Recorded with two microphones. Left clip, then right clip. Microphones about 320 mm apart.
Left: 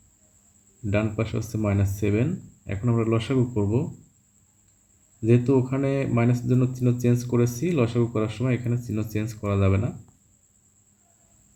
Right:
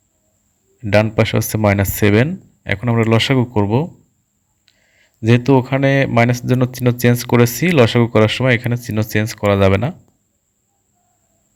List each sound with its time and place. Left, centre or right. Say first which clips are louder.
0.9 s speech: right 13 dB; right
5.2 s speech: right 7 dB; right